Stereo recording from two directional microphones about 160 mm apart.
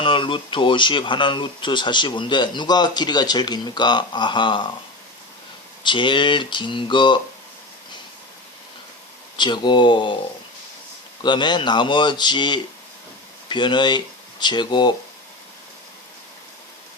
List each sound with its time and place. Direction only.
0.0 s speech: 30° left (ahead or behind)
5.8 s speech: 30° left (ahead or behind)
9.4 s speech: 30° left (ahead or behind)
11.2 s speech: 30° left (ahead or behind)